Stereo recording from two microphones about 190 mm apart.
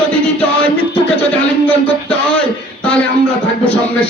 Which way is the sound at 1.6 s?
5° left (ahead or behind).